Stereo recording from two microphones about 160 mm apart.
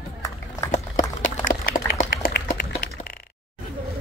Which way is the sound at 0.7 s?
55° left (ahead or behind).